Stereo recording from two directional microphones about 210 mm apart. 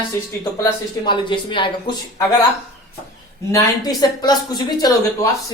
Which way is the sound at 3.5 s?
20° left (ahead or behind).